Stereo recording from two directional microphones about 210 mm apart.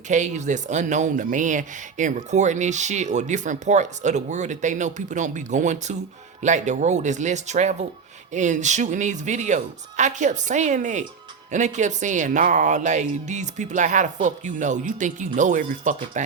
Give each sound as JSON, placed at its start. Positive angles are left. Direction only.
{"t": 0.1, "sound": "speech", "side_deg": -35}